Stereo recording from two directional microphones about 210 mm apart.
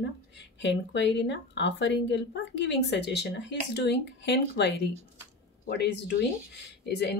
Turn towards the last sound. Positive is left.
turn(degrees=55)  # may be behind; listen again after turning